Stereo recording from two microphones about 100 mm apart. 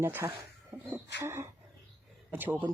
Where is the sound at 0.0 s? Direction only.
25° right (ahead or behind).